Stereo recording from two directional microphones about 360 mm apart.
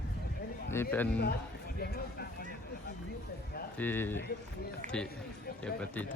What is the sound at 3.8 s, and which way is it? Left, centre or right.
Speech, centre.